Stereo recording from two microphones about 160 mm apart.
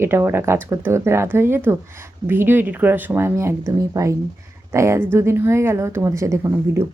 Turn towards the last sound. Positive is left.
turn(degrees=-20)  # may be behind; listen again after turning